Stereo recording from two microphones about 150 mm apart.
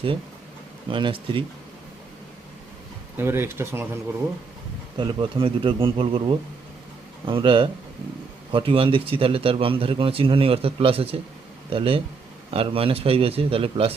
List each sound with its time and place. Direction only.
0.9 s a man's voice: 35° right (ahead or behind)
3.2 s speech: 15° right (ahead or behind)
4.9 s a man's voice: 35° right (ahead or behind)